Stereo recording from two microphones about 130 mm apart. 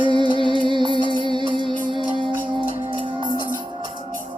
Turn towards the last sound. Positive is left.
turn(degrees=-40)  # may be behind; listen again after turning